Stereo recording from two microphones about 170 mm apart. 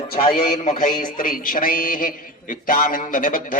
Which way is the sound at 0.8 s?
55° left (ahead or behind).